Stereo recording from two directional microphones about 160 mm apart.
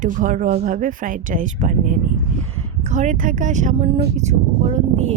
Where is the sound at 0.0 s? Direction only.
55° right (ahead or behind).